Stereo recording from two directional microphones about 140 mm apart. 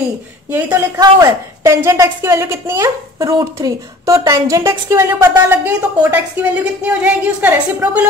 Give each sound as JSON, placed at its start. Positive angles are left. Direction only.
{"t": 0.5, "sound": "a woman's voice", "side_deg": -15}